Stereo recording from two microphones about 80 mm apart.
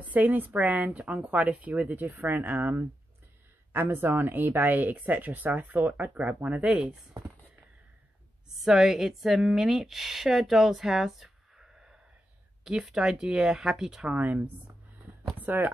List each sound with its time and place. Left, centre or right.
0.0 s a woman's voice: right
8.5 s a woman's voice: centre
14.1 s speech: centre